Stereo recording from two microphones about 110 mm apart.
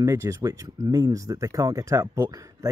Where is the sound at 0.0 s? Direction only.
30° right (ahead or behind).